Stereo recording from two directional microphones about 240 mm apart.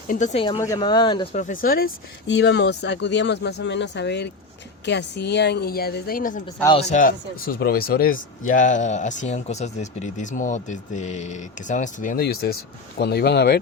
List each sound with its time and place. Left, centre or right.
0.1 s speech: left